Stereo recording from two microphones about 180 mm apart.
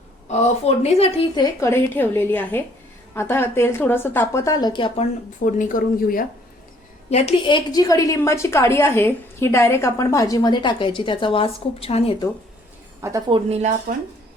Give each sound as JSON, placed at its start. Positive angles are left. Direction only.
{"t": 0.3, "sound": "speech", "side_deg": 35}
{"t": 1.4, "sound": "speech", "side_deg": 15}
{"t": 5.4, "sound": "speech", "side_deg": 45}
{"t": 7.1, "sound": "a woman's voice", "side_deg": 35}
{"t": 13.0, "sound": "a woman's voice", "side_deg": -20}
{"t": 13.5, "sound": "speech", "side_deg": -40}